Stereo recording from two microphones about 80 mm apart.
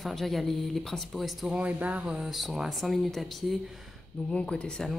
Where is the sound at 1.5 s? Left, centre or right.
Centre.